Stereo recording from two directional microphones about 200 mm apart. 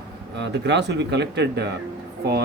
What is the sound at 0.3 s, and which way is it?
Speech, 60° right (ahead or behind).